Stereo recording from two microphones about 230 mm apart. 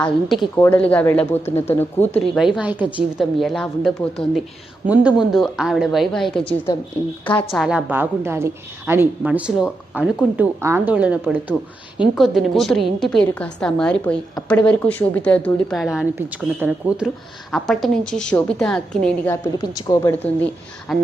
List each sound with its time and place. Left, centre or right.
0.0 s a woman's voice: centre
6.7 s speech: centre
7.3 s a woman's voice: centre